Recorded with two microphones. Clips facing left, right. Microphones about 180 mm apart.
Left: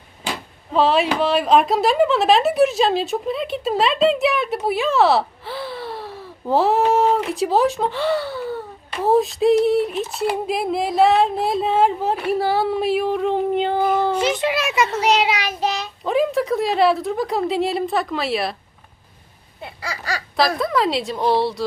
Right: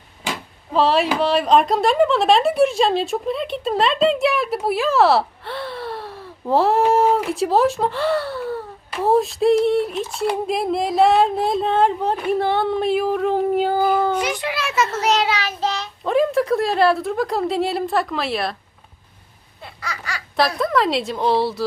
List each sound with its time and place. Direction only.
0.7 s speech: centre (ahead or behind)
14.1 s a child's voice: 25° left (ahead or behind)
15.0 s child singing: 10° left (ahead or behind)
16.0 s speech: centre (ahead or behind)
19.6 s babbling: 30° left (ahead or behind)
20.6 s speech: centre (ahead or behind)